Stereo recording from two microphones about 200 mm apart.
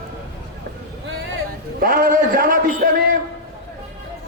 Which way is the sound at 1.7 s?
45° right (ahead or behind).